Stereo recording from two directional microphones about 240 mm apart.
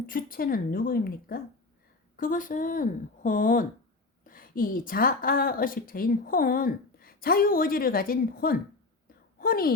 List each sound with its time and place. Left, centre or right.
0.0 s a woman's voice: left